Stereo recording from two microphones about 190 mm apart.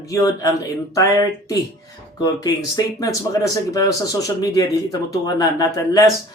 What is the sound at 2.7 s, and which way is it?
Speech, 15° left (ahead or behind).